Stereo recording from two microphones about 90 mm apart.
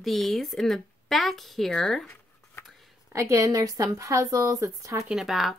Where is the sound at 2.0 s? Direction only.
25° left (ahead or behind).